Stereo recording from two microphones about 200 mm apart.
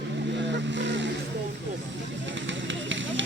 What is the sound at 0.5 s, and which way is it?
Vehicle, 65° right (ahead or behind).